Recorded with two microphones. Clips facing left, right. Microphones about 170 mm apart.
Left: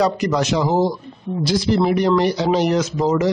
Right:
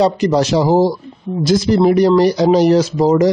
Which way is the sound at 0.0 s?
30° right (ahead or behind).